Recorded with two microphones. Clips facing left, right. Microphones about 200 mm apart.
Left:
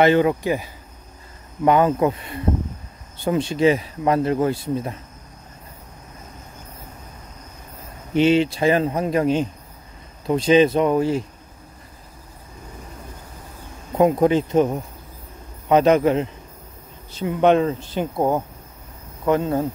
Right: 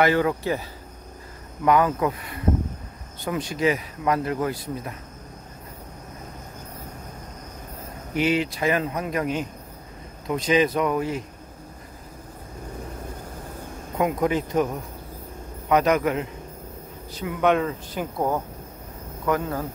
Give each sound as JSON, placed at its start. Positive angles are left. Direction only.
{"t": 0.0, "sound": "speech", "side_deg": 20}
{"t": 1.6, "sound": "speech", "side_deg": 25}
{"t": 8.1, "sound": "speech", "side_deg": 25}
{"t": 13.9, "sound": "speech", "side_deg": 30}